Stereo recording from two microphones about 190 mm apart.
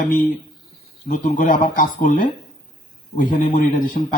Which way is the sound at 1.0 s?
45° left (ahead or behind).